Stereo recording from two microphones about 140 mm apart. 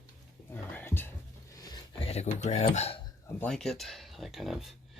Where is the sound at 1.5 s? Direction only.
25° left (ahead or behind).